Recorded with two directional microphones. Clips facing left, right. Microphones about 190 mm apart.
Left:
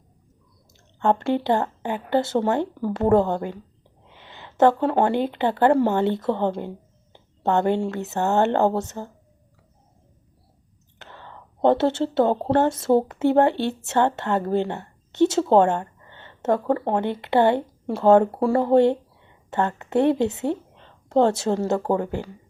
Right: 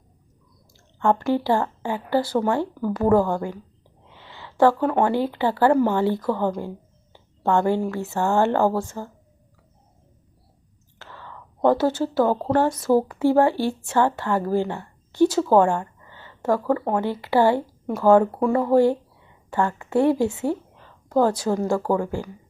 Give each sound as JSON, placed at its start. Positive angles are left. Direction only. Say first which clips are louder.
{"t": 1.0, "sound": "speech", "louder": "even", "side_deg": 25}
{"t": 11.0, "sound": "whispering", "louder": "right 1 dB", "side_deg": 20}
{"t": 11.6, "sound": "a woman's voice", "louder": "even", "side_deg": 25}